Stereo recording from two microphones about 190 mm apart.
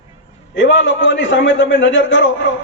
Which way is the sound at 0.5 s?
75° left (ahead or behind).